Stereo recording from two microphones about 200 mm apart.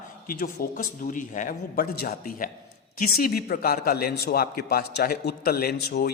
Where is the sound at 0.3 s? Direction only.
45° left (ahead or behind).